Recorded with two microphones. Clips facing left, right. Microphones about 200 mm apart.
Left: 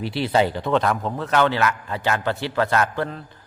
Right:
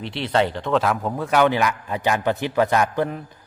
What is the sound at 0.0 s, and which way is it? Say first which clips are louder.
A man's voice: left 1 dB; 5° left (ahead or behind).